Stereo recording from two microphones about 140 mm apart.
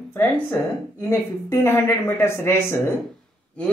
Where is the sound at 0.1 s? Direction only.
15° left (ahead or behind).